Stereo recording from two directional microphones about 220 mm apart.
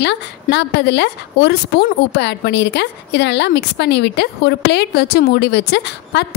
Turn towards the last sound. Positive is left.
turn(degrees=50)  # may be behind; listen again after turning